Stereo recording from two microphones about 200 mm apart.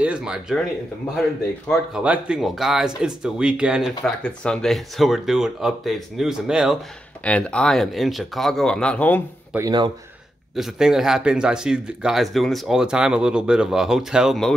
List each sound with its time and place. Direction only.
0.0 s speech: 5° right (ahead or behind)
1.7 s speech: 5° right (ahead or behind)
9.5 s speech: 15° right (ahead or behind)
10.5 s speech: centre (ahead or behind)